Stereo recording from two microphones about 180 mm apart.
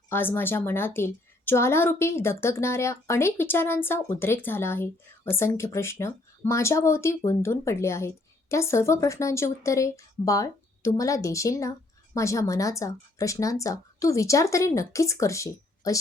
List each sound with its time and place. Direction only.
0.1 s a woman's voice: 10° left (ahead or behind)